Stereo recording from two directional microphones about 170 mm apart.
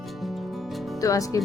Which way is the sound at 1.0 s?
20° left (ahead or behind).